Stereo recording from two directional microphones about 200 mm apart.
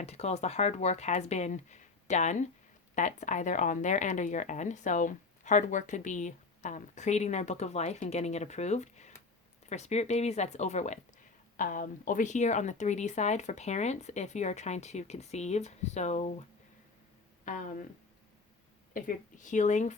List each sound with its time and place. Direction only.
0.0 s speech: 30° left (ahead or behind)
17.4 s speech: 40° left (ahead or behind)
18.9 s speech: 40° left (ahead or behind)